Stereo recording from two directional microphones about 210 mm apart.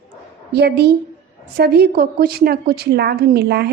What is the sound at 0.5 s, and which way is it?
A woman's voice, 50° right (ahead or behind).